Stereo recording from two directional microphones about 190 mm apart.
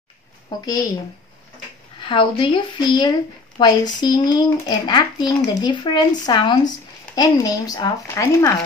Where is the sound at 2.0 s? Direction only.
25° left (ahead or behind).